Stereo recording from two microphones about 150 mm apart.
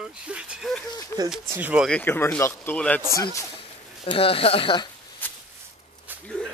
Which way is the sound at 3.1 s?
20° left (ahead or behind).